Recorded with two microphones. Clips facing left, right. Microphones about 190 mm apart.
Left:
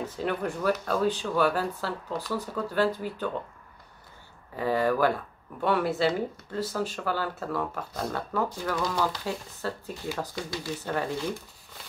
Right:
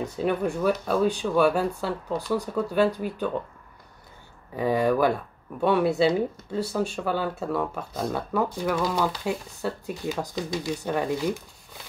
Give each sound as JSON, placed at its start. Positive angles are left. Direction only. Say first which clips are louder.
{"t": 0.0, "sound": "speech", "louder": "right 4 dB", "side_deg": -15}
{"t": 4.6, "sound": "speech", "louder": "right 3 dB", "side_deg": -15}